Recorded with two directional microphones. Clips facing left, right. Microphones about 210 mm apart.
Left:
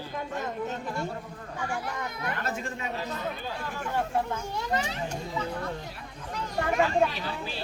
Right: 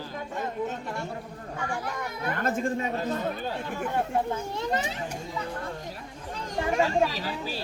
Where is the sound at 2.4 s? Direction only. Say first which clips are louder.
Right 6 dB; 50° right (ahead or behind).